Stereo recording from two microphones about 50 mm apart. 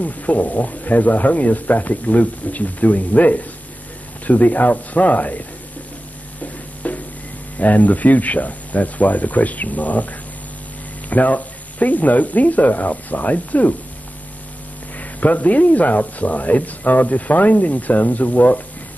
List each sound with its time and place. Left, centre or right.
0.0 s speech: left
6.4 s a sound: left
7.5 s speech: left
15.0 s speech: left